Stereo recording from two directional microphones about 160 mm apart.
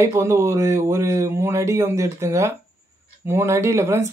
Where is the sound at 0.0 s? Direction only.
15° right (ahead or behind).